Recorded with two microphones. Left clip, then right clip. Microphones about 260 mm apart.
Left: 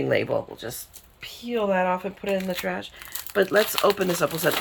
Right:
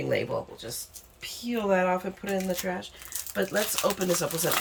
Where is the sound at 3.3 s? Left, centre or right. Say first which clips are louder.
Left 7 dB; centre.